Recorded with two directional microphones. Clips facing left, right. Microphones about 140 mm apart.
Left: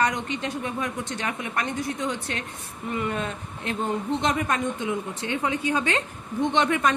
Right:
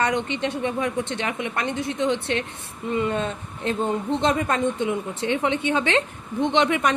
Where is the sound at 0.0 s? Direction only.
25° right (ahead or behind).